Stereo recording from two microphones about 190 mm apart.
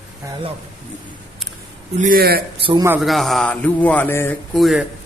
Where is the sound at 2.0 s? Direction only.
50° right (ahead or behind).